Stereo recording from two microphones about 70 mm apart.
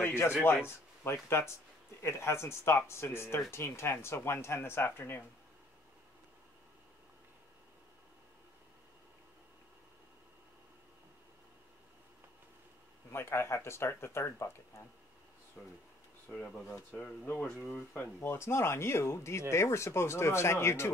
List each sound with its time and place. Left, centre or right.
0.0 s a man's voice: left
13.1 s speech: left
15.6 s speech: centre
16.3 s speech: left
17.6 s speech: left